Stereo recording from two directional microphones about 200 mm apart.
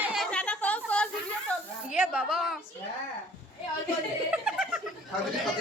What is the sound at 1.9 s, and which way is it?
Speech, 5° right (ahead or behind).